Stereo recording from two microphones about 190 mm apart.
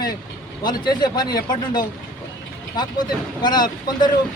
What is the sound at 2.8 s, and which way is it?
A man's voice, 20° left (ahead or behind).